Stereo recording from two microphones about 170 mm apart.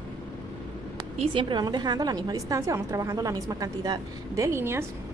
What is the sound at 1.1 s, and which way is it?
A woman's voice, 30° right (ahead or behind).